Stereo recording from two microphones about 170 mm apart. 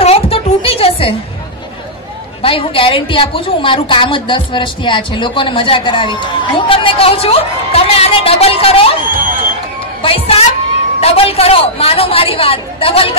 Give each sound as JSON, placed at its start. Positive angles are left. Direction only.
{"t": 0.0, "sound": "music", "side_deg": 35}
{"t": 2.4, "sound": "a woman's voice", "side_deg": 30}
{"t": 10.0, "sound": "a woman's voice", "side_deg": 35}